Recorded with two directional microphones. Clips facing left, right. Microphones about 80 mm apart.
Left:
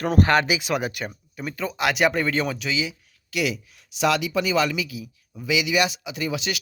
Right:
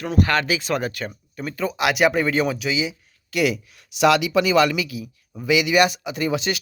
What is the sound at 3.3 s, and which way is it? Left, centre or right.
Speech, right.